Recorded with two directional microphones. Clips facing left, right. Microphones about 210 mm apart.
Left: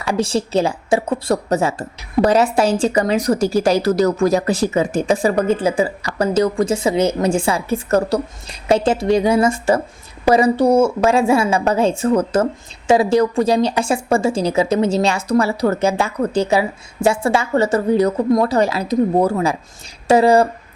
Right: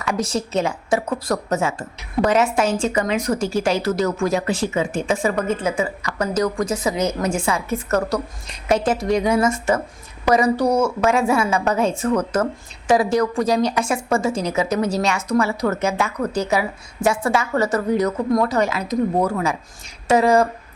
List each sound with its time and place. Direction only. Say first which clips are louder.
0.0 s a woman's voice: left 4 dB; 30° left (ahead or behind)